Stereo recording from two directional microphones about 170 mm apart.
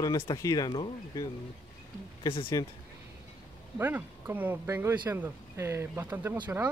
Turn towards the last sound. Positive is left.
turn(degrees=-10)  # may be behind; listen again after turning